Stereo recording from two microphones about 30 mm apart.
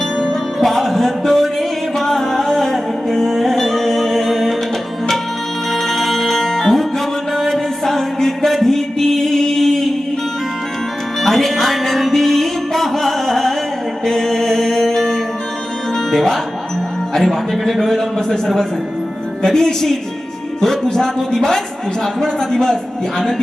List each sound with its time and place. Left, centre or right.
0.6 s music: centre
5.7 s music: centre
8.4 s a sound: centre
11.2 s music: centre
14.0 s mantra: centre
16.1 s music: centre
17.2 s a sound: centre
19.5 s a woman's voice: centre